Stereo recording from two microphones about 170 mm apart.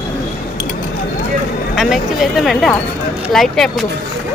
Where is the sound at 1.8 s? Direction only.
Centre (ahead or behind).